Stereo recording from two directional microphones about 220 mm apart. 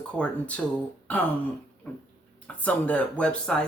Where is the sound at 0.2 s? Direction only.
5° left (ahead or behind).